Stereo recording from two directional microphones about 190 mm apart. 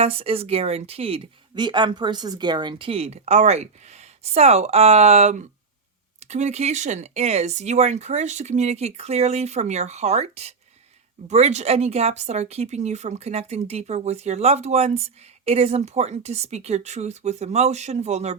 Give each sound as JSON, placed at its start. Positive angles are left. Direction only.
{"t": 0.0, "sound": "speech", "side_deg": -30}